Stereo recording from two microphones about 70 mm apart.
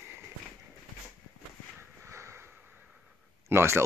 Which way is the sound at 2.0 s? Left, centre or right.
Right.